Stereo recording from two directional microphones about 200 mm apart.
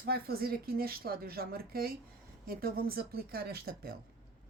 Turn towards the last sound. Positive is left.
turn(degrees=-50)  # may be behind; listen again after turning